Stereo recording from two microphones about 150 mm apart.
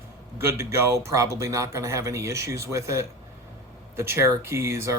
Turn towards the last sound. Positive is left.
turn(degrees=-20)  # may be behind; listen again after turning